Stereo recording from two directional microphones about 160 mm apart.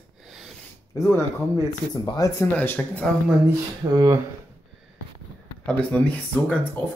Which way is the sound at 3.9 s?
20° right (ahead or behind).